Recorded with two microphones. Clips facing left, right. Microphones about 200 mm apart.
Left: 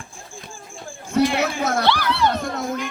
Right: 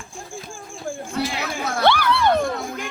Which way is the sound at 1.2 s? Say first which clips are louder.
Left 9 dB; 60° left (ahead or behind).